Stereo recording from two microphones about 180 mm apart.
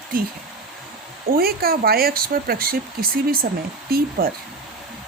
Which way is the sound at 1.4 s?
60° right (ahead or behind).